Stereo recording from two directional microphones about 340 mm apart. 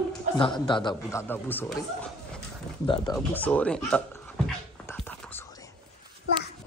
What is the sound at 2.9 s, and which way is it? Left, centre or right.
Speech, centre.